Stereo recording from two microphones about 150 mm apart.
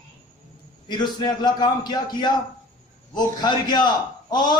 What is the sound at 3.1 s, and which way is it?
A man's voice, 30° left (ahead or behind).